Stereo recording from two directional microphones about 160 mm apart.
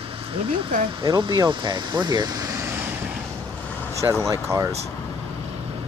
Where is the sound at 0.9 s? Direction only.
30° right (ahead or behind).